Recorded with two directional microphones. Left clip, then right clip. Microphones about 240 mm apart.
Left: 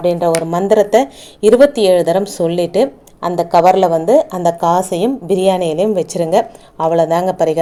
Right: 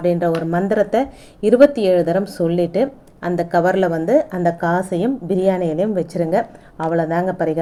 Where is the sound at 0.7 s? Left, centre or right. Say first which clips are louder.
Left 8 dB; centre.